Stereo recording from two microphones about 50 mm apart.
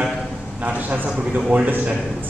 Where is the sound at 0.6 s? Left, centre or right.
Right.